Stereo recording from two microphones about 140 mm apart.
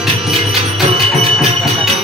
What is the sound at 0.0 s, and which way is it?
Music, centre (ahead or behind).